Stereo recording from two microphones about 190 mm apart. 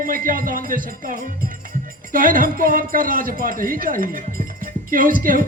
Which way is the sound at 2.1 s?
45° right (ahead or behind).